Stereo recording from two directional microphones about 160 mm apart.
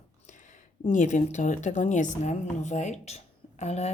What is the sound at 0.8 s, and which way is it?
Speech, 50° left (ahead or behind).